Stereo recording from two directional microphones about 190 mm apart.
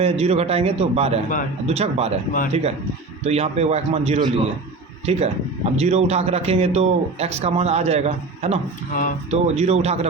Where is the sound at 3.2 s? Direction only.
35° right (ahead or behind).